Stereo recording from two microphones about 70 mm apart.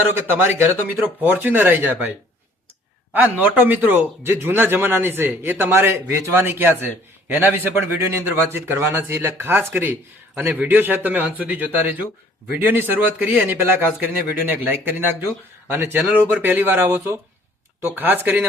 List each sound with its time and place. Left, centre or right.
0.1 s a man's voice: right
8.0 s a man's voice: right